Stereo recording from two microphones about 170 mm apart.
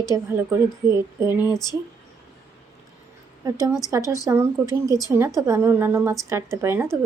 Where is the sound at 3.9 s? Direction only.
20° right (ahead or behind).